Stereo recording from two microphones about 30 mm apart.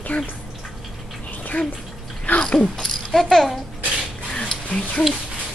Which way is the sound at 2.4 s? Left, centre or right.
Left.